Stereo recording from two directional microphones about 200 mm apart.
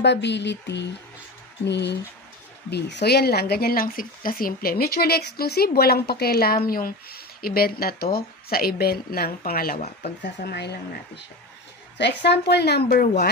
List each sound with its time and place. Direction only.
0.0 s a woman's voice: 60° left (ahead or behind)